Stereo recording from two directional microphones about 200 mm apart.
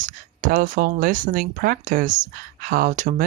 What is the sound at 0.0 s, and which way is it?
Speech, 40° right (ahead or behind).